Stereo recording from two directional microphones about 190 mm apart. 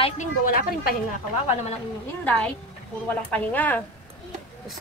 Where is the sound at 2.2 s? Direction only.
5° left (ahead or behind).